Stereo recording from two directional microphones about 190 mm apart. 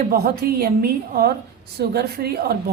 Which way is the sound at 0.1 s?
50° right (ahead or behind).